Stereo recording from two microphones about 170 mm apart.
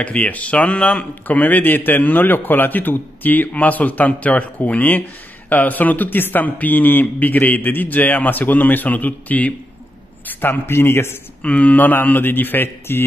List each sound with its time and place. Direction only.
0.0 s a man's voice: 10° left (ahead or behind)